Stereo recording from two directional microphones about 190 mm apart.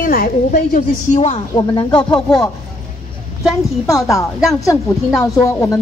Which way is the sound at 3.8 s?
15° left (ahead or behind).